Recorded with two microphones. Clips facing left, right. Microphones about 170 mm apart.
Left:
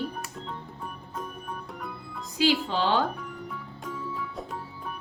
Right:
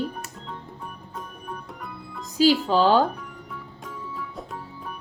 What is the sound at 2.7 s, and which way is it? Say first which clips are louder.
Speech: right 7 dB; 40° right (ahead or behind).